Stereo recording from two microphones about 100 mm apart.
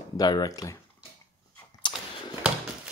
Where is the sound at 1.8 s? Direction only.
55° left (ahead or behind).